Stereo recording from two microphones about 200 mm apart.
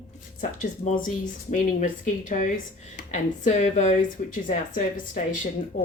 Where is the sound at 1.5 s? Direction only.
40° left (ahead or behind).